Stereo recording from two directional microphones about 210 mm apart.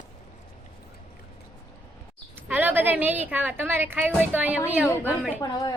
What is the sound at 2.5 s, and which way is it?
A woman's voice, 10° right (ahead or behind).